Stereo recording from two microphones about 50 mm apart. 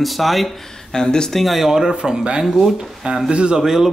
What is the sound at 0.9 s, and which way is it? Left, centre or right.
Speech, centre.